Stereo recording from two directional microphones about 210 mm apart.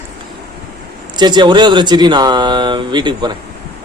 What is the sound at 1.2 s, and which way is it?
A man's voice, 20° right (ahead or behind).